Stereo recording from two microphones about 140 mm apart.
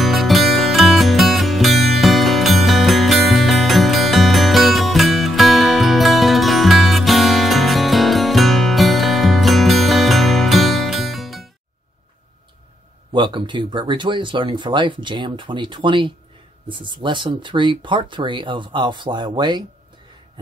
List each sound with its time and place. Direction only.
0.0 s music: centre (ahead or behind)
13.1 s speech: 35° right (ahead or behind)